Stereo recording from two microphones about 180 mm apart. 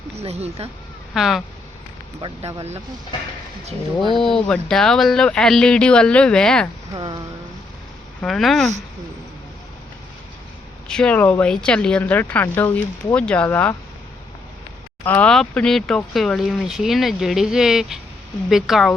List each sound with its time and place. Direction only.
0.2 s speech: 35° right (ahead or behind)
1.1 s speech: centre (ahead or behind)
2.6 s speech: 35° right (ahead or behind)
4.1 s speech: centre (ahead or behind)
6.9 s a sound: 25° right (ahead or behind)
8.2 s speech: centre (ahead or behind)
10.8 s speech: 5° left (ahead or behind)
15.0 s speech: 10° left (ahead or behind)